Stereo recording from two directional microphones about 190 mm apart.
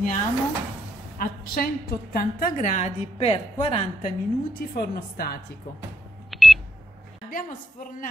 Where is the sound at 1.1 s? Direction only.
50° left (ahead or behind); by 4.1 s 30° left (ahead or behind).